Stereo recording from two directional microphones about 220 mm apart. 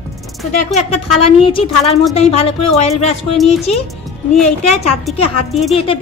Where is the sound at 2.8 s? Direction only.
30° left (ahead or behind).